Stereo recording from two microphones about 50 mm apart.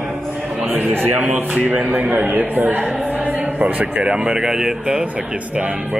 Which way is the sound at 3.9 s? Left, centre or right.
Right.